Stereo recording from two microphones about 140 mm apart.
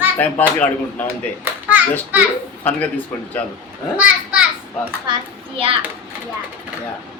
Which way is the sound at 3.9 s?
10° right (ahead or behind).